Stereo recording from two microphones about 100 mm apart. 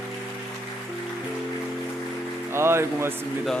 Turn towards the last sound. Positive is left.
turn(degrees=-25)  # may be behind; listen again after turning